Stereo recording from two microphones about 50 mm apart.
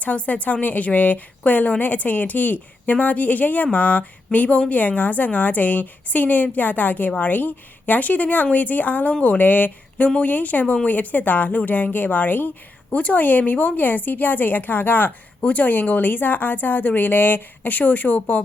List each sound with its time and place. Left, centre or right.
0.0 s a woman's voice: left
15.4 s a woman's voice: left